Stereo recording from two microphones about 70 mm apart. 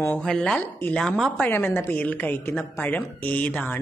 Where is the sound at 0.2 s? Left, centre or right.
Centre.